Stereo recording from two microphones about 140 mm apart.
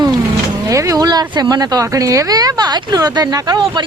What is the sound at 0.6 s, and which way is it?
Speech, 25° right (ahead or behind).